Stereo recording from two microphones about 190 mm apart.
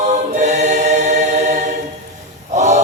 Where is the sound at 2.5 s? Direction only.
40° right (ahead or behind).